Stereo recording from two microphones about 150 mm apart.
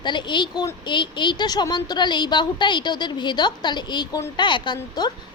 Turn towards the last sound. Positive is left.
turn(degrees=30)  # may be behind; listen again after turning